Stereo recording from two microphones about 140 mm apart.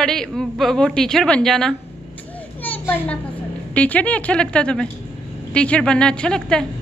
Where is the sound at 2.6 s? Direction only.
10° left (ahead or behind).